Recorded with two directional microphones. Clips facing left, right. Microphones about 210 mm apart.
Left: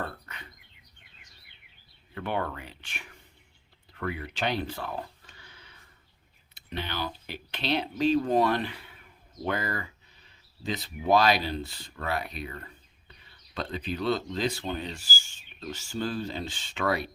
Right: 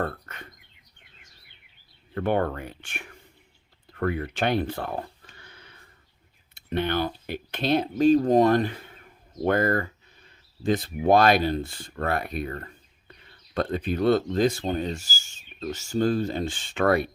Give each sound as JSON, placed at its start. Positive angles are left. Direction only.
{"t": 0.0, "sound": "speech", "side_deg": -50}
{"t": 2.1, "sound": "rub", "side_deg": -50}
{"t": 5.4, "sound": "a sound", "side_deg": -55}
{"t": 6.5, "sound": "rub", "side_deg": -55}